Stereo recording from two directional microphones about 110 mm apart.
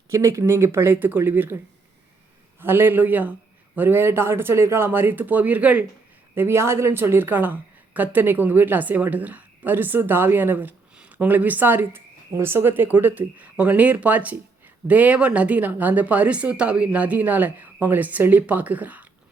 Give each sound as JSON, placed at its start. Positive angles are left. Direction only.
{"t": 0.1, "sound": "speech", "side_deg": -25}
{"t": 2.6, "sound": "a woman's voice", "side_deg": -20}